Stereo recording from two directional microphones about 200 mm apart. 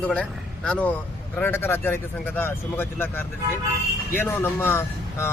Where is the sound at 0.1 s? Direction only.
5° left (ahead or behind).